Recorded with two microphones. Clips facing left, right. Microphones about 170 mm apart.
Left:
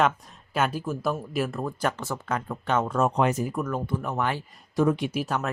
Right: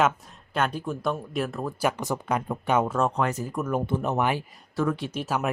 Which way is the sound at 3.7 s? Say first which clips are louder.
Right 3 dB; 20° right (ahead or behind).